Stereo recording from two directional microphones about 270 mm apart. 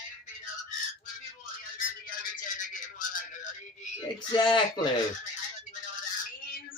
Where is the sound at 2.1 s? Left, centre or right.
Left.